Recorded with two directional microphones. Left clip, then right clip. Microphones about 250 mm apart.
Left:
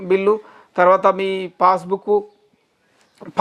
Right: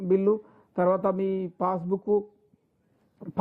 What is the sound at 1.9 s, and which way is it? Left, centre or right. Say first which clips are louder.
Speech: left 7 dB; left.